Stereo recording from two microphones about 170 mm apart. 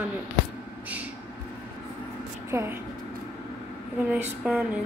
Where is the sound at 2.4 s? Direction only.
15° right (ahead or behind).